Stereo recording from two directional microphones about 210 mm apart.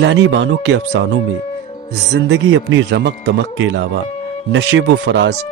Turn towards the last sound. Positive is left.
turn(degrees=-55)  # may be behind; listen again after turning